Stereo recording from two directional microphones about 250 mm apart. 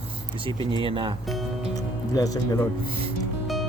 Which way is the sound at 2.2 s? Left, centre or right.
Centre.